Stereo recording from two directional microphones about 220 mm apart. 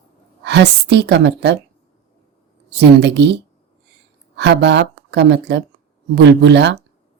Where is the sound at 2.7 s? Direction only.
50° right (ahead or behind).